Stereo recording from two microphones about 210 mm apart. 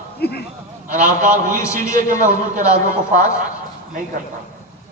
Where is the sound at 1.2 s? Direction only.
35° right (ahead or behind).